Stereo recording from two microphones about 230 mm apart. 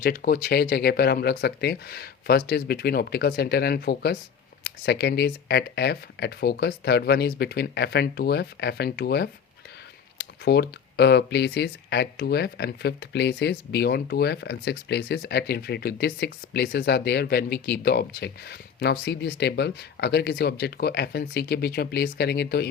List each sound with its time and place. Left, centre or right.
0.0 s speech: left